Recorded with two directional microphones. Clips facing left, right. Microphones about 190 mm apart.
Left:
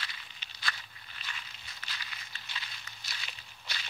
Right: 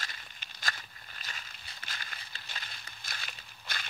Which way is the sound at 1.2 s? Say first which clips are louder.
Left 1 dB; 45° right (ahead or behind).